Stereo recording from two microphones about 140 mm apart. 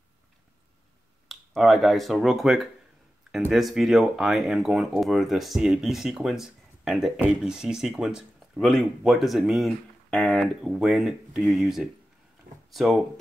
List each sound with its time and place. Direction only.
1.3 s speech: centre (ahead or behind)
10.1 s speech: 10° left (ahead or behind)
10.6 s speech: centre (ahead or behind)